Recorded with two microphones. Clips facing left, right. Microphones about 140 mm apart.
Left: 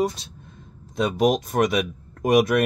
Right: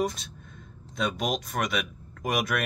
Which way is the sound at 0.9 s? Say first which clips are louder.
Left 8 dB; 40° left (ahead or behind).